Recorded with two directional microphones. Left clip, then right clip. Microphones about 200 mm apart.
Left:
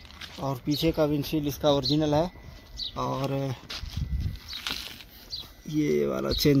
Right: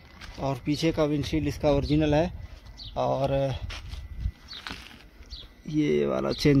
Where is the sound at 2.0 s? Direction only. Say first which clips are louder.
Right 1 dB; 60° right (ahead or behind).